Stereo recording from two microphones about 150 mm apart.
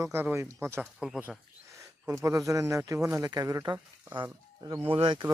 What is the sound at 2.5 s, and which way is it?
Speech, 20° right (ahead or behind).